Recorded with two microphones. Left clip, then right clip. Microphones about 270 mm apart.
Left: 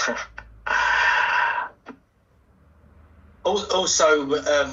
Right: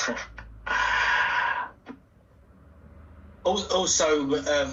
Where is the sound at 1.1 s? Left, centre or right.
Centre.